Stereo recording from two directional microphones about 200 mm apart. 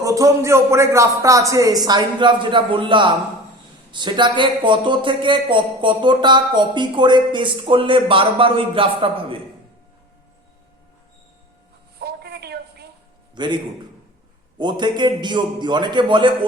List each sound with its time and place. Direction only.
0.0 s a man's voice: 15° right (ahead or behind)
11.9 s a sound: 55° right (ahead or behind)
13.3 s a man's voice: 25° right (ahead or behind)
14.6 s a man's voice: 20° right (ahead or behind)